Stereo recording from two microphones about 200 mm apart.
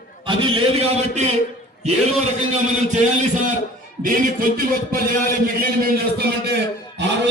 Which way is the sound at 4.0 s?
45° right (ahead or behind).